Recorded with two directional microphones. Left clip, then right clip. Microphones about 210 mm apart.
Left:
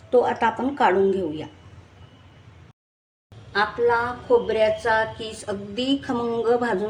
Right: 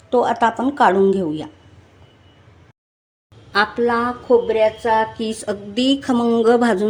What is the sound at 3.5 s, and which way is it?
Speech, 45° right (ahead or behind).